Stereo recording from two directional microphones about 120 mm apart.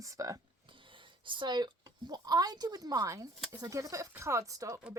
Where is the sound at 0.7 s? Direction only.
45° right (ahead or behind); by 4.8 s 25° right (ahead or behind).